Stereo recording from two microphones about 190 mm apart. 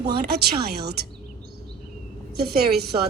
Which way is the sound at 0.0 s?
55° right (ahead or behind).